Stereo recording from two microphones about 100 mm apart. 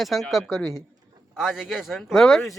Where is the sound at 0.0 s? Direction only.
Centre (ahead or behind).